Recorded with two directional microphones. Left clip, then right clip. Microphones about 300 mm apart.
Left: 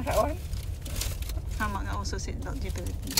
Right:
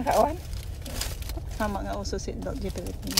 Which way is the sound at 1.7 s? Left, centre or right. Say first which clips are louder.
Right 3 dB; centre.